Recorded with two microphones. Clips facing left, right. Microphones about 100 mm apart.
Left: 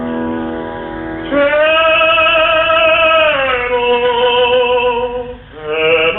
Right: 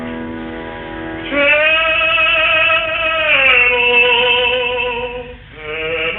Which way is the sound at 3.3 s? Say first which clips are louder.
Left 3 dB; 25° left (ahead or behind).